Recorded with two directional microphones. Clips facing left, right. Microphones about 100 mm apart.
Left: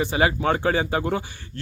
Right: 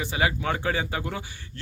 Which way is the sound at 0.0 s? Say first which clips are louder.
Left 5 dB; 35° left (ahead or behind).